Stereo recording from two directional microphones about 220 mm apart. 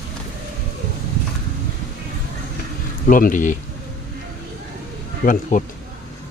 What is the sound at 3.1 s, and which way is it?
Speech, 40° left (ahead or behind).